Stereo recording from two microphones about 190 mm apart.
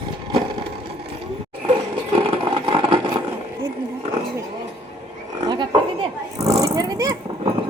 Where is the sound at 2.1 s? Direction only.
30° right (ahead or behind).